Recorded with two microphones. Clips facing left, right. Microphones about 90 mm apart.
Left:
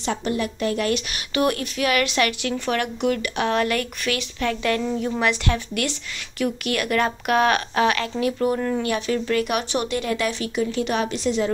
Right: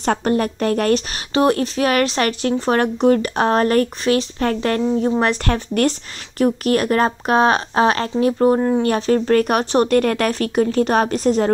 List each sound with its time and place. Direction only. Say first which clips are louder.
0.0 s speech: right 6 dB; 45° right (ahead or behind)